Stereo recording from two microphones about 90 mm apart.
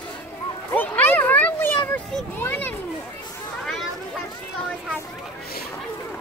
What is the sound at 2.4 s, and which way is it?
Children playing, 20° left (ahead or behind).